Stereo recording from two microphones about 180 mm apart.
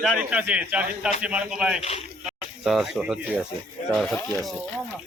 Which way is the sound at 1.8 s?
35° left (ahead or behind).